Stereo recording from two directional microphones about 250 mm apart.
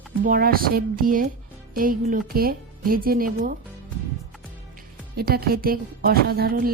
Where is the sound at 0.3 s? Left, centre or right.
Right.